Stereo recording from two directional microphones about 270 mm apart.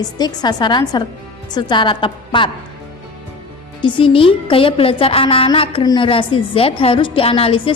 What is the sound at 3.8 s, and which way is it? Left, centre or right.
A woman's voice, centre.